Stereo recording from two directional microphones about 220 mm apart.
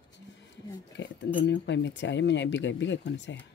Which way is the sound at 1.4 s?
55° left (ahead or behind).